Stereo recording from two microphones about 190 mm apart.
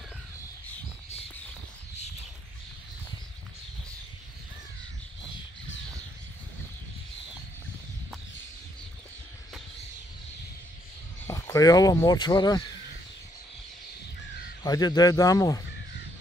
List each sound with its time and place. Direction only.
11.2 s speech: 15° left (ahead or behind)
14.6 s speech: 20° left (ahead or behind)